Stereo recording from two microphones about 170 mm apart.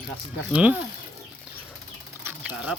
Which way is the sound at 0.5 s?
10° right (ahead or behind).